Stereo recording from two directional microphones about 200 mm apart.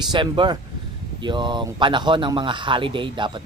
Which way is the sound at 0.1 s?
25° right (ahead or behind).